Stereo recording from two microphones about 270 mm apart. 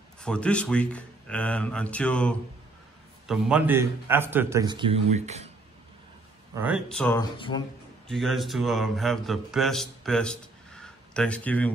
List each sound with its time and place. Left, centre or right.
0.2 s a man's voice: centre; by 5.5 s right
6.5 s speech: centre
7.3 s speech: centre
8.1 s speech: centre